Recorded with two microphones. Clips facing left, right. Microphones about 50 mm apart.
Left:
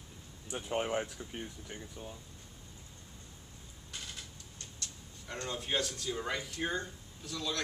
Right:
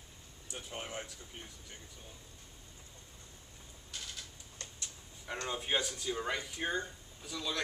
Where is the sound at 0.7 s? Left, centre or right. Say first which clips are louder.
Left 10 dB; left.